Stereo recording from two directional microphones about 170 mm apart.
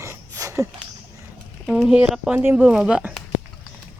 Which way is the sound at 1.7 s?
5° right (ahead or behind).